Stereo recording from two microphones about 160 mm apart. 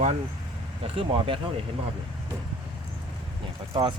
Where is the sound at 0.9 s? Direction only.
35° right (ahead or behind).